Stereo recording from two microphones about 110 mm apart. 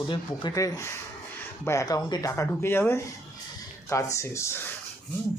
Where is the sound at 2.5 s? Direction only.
20° left (ahead or behind).